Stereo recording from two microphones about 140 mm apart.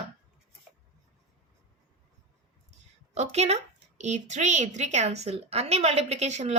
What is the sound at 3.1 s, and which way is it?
A woman's voice, 50° right (ahead or behind).